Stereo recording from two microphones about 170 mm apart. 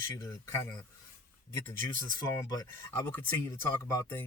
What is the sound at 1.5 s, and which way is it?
Speech, 15° left (ahead or behind).